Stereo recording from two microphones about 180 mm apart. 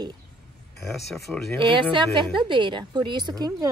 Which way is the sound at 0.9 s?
5° left (ahead or behind).